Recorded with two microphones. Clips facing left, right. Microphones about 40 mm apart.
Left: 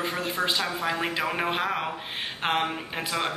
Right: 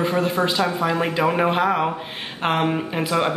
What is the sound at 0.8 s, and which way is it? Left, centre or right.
Speech, left.